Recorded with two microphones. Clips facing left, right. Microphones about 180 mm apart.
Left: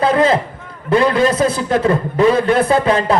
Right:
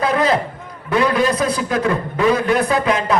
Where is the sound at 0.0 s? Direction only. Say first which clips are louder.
Left 4 dB; 30° left (ahead or behind).